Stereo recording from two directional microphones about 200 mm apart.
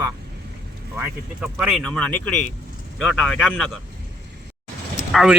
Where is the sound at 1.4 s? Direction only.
5° right (ahead or behind).